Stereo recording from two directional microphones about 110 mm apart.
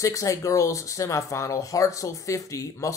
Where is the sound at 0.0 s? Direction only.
30° left (ahead or behind).